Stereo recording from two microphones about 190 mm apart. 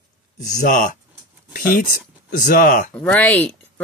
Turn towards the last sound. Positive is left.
turn(degrees=5)  # may be behind; listen again after turning